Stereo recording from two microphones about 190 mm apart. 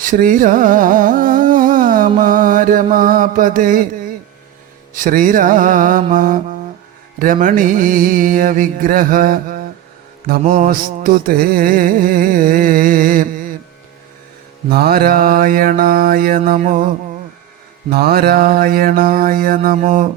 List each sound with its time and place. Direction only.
0.0 s carnatic music: 45° right (ahead or behind)
4.9 s carnatic music: 45° right (ahead or behind)
14.7 s carnatic music: 55° right (ahead or behind)
17.9 s carnatic music: 55° right (ahead or behind)